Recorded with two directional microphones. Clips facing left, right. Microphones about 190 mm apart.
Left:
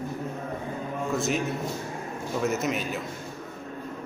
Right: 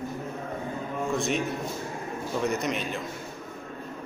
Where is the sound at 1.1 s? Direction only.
Centre (ahead or behind).